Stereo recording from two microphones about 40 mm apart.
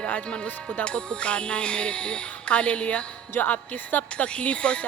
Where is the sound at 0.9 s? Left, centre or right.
Left.